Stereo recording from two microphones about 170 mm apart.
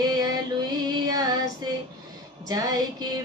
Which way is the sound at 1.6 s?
25° right (ahead or behind).